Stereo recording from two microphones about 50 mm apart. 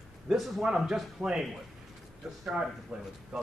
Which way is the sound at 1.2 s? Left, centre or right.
Centre.